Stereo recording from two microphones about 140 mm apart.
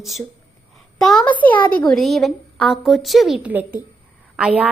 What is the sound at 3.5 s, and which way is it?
A child's voice, 15° right (ahead or behind).